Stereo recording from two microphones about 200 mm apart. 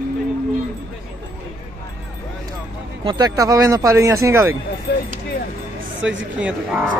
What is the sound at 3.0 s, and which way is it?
Speech, 20° right (ahead or behind).